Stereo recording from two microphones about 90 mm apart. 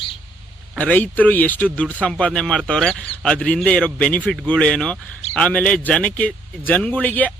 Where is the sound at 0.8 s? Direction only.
15° left (ahead or behind).